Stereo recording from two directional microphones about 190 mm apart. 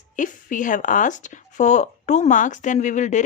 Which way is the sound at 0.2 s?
45° left (ahead or behind).